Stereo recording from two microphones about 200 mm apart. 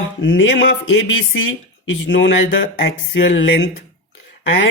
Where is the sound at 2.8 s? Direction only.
60° left (ahead or behind).